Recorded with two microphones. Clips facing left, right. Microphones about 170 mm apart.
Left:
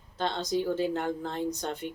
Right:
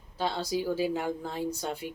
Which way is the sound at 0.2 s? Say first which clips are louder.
Left 1 dB; 10° right (ahead or behind).